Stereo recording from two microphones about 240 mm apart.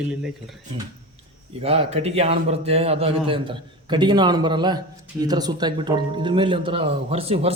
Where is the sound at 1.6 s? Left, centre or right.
Right.